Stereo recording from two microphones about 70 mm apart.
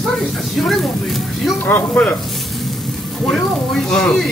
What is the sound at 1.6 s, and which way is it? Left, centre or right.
Speech, left.